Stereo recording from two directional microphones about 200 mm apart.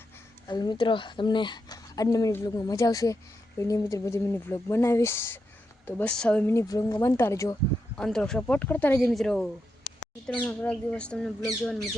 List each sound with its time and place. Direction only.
0.4 s a woman's voice: 20° left (ahead or behind)
7.9 s speech: 5° left (ahead or behind)